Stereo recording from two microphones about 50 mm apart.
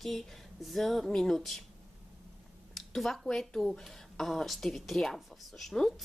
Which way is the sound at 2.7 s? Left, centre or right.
Centre.